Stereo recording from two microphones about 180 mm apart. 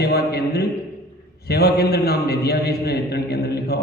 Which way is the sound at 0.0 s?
60° left (ahead or behind).